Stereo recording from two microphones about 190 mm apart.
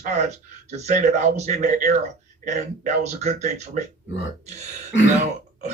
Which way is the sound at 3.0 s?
40° right (ahead or behind).